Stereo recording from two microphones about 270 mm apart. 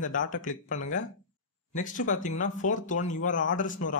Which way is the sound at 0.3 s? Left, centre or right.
Left.